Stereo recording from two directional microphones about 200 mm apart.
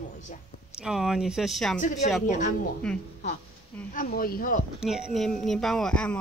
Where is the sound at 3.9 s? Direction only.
45° left (ahead or behind).